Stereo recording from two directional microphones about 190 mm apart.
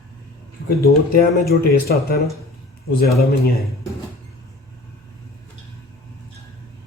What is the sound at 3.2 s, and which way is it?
Speech, 55° left (ahead or behind).